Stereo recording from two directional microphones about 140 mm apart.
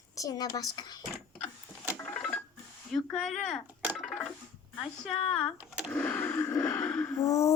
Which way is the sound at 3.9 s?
Centre (ahead or behind).